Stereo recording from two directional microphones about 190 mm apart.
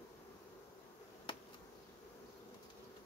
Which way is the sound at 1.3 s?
25° left (ahead or behind).